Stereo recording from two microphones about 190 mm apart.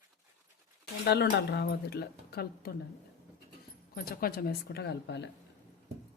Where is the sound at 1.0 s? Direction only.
60° left (ahead or behind).